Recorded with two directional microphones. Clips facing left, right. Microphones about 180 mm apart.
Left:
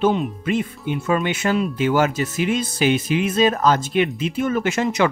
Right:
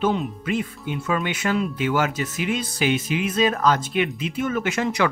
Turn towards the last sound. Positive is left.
turn(degrees=25)  # may be behind; listen again after turning